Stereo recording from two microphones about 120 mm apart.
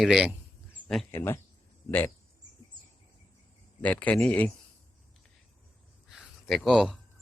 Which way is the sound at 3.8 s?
15° left (ahead or behind).